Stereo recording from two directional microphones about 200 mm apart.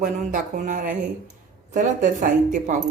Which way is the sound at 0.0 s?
40° right (ahead or behind).